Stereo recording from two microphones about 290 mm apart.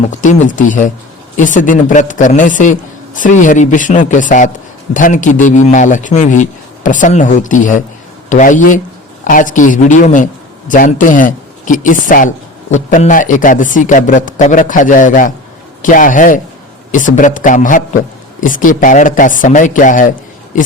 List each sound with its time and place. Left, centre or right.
0.1 s a man's voice: left